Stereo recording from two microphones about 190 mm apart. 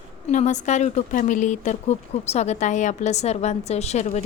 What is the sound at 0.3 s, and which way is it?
A woman's voice, 40° left (ahead or behind).